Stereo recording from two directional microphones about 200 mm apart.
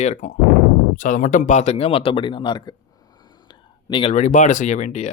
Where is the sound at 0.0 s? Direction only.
35° left (ahead or behind).